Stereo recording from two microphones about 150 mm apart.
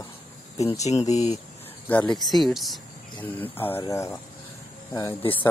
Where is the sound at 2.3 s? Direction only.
Centre (ahead or behind).